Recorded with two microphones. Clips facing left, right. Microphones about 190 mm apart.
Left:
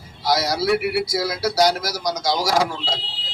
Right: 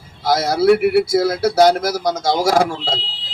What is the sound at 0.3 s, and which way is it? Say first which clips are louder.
Speech: right 6 dB; 55° right (ahead or behind).